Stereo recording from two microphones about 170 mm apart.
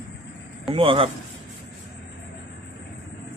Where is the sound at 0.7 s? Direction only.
30° right (ahead or behind).